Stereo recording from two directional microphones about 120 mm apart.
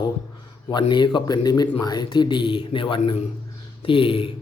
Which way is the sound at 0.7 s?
40° left (ahead or behind).